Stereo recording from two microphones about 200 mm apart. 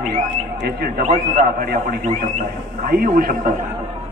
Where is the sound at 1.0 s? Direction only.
40° right (ahead or behind).